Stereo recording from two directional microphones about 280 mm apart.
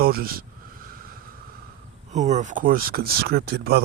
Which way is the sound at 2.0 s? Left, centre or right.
Right.